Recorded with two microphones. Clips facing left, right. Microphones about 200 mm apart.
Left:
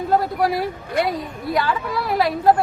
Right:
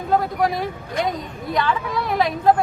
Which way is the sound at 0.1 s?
5° left (ahead or behind).